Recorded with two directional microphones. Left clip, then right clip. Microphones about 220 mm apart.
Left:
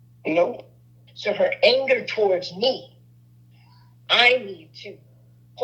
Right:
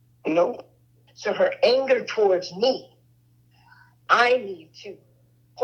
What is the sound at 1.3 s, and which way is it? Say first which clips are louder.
Speech: even; 15° left (ahead or behind).